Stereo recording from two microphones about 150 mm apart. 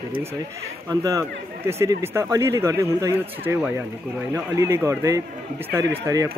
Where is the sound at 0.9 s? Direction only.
25° right (ahead or behind).